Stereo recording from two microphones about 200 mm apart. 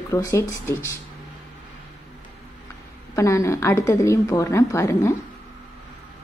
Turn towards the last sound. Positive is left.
turn(degrees=15)  # may be behind; listen again after turning